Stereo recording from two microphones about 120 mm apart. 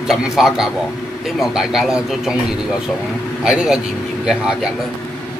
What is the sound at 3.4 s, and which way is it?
Speech, 5° right (ahead or behind).